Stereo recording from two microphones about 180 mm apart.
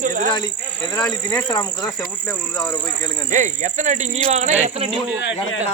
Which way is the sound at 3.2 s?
45° right (ahead or behind).